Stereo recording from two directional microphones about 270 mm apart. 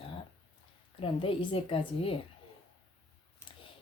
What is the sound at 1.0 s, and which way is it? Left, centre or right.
Speech, centre.